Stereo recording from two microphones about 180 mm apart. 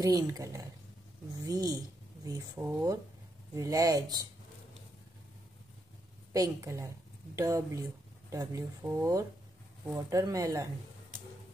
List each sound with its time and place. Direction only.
0.0 s speech: 20° right (ahead or behind)
6.3 s speech: 15° right (ahead or behind)